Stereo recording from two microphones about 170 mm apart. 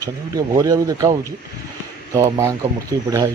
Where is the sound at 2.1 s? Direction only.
15° right (ahead or behind).